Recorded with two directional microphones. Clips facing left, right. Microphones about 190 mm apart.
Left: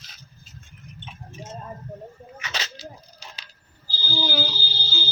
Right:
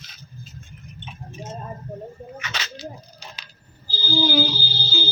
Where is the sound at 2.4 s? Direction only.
35° left (ahead or behind).